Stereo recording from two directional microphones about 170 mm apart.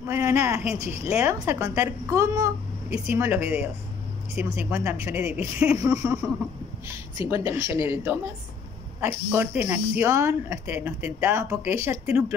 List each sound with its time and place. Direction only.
0.0 s speech: 15° right (ahead or behind)
7.2 s speech: 15° right (ahead or behind)